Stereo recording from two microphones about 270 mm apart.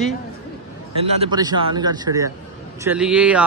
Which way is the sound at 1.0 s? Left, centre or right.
Centre.